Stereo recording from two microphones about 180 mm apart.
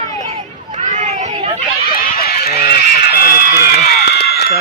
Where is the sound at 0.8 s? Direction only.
40° right (ahead or behind).